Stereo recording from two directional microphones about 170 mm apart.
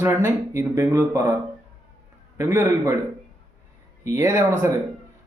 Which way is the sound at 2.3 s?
15° right (ahead or behind).